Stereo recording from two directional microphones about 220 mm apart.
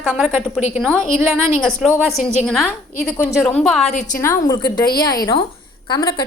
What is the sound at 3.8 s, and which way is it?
Speech, 35° left (ahead or behind).